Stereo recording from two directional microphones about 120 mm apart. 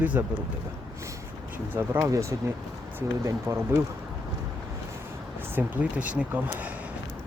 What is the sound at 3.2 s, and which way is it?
Speech, 25° right (ahead or behind).